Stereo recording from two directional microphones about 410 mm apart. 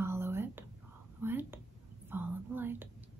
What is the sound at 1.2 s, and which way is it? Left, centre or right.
Whispering, centre.